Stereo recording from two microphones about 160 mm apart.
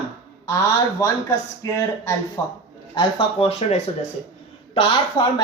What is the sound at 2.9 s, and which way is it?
Speech, 35° left (ahead or behind).